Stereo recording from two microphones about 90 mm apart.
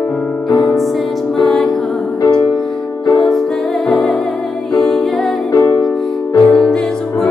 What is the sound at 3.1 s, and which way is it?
Music, 5° left (ahead or behind).